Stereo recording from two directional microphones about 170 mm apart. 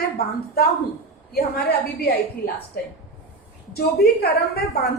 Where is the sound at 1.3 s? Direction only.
65° left (ahead or behind).